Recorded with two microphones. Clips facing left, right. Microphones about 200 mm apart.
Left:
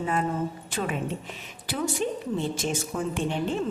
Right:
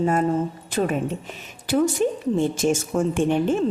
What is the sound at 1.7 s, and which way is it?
A woman's voice, 45° right (ahead or behind).